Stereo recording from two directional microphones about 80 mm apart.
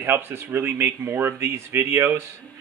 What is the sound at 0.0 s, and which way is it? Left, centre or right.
Speech, right.